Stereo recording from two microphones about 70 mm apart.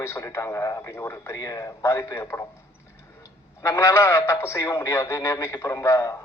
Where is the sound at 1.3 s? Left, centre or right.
Left.